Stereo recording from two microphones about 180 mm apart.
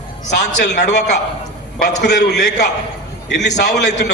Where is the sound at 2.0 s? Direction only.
70° left (ahead or behind).